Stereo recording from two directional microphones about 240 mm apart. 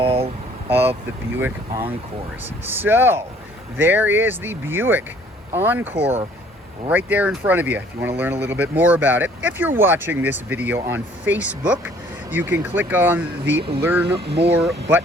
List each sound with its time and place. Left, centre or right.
0.0 s vehicle: right
0.7 s speech: centre
13.6 s a sound: right
14.6 s speech: centre